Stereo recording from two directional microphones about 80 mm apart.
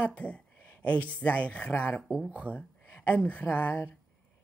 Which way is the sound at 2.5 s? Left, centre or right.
Left.